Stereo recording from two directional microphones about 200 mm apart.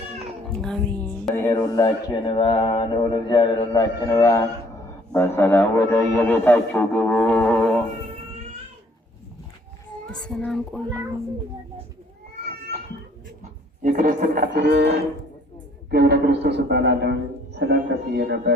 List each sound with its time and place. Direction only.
0.5 s a man's voice: centre (ahead or behind)
10.1 s a child's voice: 5° left (ahead or behind)
13.4 s a man's voice: 40° right (ahead or behind); by 18.5 s 55° right (ahead or behind)